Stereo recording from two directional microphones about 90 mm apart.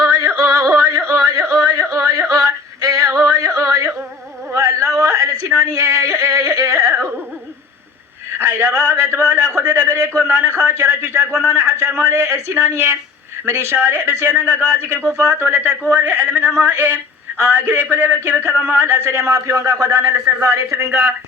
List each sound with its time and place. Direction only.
0.0 s yodeling: 35° right (ahead or behind)
2.3 s synthetic singing: 35° right (ahead or behind)
3.3 s yodeling: 35° right (ahead or behind)
4.5 s a sound: 35° right (ahead or behind)
4.9 s yodeling: 35° right (ahead or behind)
8.4 s a sound: 25° right (ahead or behind)
12.7 s a man's voice: 25° right (ahead or behind)